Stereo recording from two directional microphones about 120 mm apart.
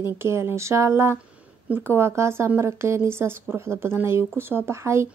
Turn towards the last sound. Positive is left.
turn(degrees=-25)  # may be behind; listen again after turning